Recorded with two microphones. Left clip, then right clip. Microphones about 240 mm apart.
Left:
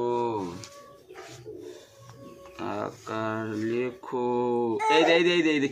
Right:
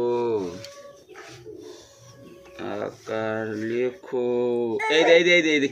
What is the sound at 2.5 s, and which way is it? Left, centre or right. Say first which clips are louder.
Speech: right 2 dB; left.